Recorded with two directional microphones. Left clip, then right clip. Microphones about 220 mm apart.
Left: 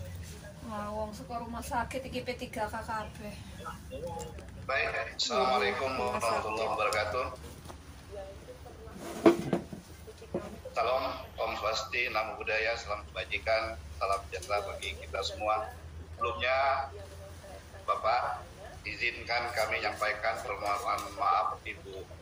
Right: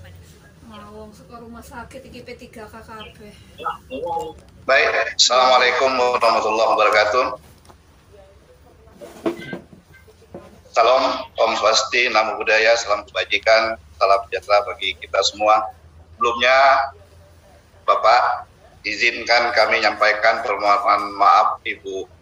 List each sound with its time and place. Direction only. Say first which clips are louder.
3.6 s a man's voice: right 15 dB; 40° right (ahead or behind)
10.7 s a man's voice: right 15 dB; 40° right (ahead or behind)